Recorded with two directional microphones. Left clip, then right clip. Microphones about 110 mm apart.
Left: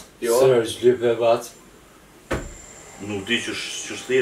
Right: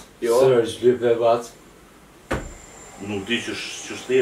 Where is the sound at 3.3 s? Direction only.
Centre (ahead or behind).